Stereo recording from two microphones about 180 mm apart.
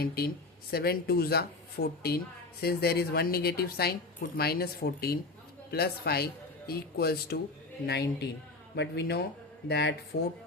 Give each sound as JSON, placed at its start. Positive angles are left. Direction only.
{"t": 0.0, "sound": "a man's voice", "side_deg": 55}